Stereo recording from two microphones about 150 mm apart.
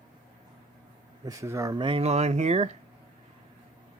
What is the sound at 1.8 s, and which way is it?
Speech, 40° right (ahead or behind).